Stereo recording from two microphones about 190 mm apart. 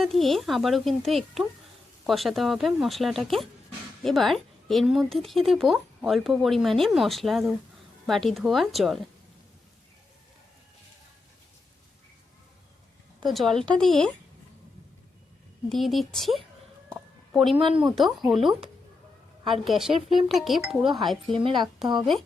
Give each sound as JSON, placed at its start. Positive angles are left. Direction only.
{"t": 0.0, "sound": "speech", "side_deg": 0}
{"t": 13.2, "sound": "speech", "side_deg": 0}
{"t": 15.7, "sound": "speech", "side_deg": 0}
{"t": 17.5, "sound": "speech", "side_deg": -30}
{"t": 17.7, "sound": "speech", "side_deg": 0}